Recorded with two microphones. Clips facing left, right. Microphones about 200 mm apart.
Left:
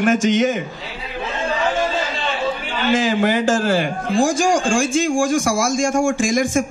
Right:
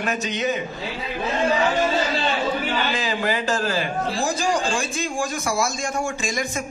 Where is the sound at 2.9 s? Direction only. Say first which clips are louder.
Left 8 dB; 50° left (ahead or behind).